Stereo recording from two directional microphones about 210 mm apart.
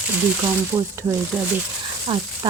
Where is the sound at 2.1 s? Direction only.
25° right (ahead or behind).